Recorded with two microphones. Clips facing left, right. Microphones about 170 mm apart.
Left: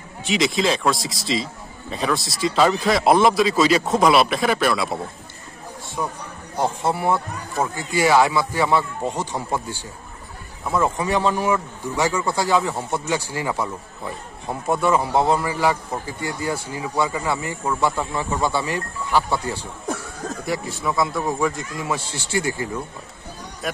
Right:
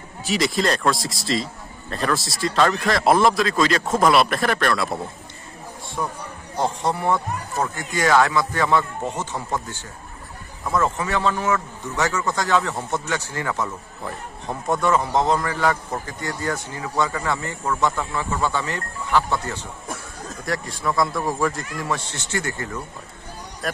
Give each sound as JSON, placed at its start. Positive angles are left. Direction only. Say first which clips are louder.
{"t": 0.3, "sound": "a man's voice", "louder": "left 1 dB", "side_deg": 0}
{"t": 6.0, "sound": "a man's voice", "louder": "even", "side_deg": 0}